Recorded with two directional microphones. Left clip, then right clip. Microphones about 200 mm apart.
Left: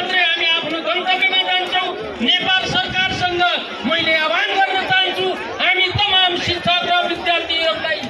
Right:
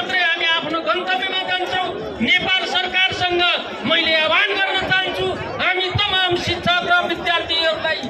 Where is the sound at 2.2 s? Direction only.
30° right (ahead or behind).